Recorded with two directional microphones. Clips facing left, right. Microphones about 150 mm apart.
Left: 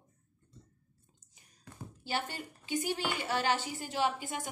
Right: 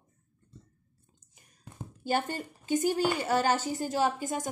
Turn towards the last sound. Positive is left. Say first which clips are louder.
# right 4 dB
turn(degrees=-40)  # may be behind; listen again after turning